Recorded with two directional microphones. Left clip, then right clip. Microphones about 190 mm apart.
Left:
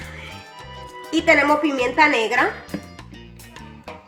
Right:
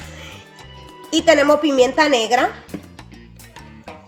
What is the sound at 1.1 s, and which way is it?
A woman's voice, 65° right (ahead or behind).